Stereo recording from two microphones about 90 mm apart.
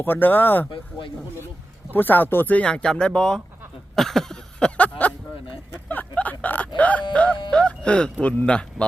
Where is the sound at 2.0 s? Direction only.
20° left (ahead or behind).